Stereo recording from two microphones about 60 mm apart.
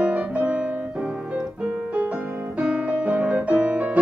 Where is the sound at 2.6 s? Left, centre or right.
Centre.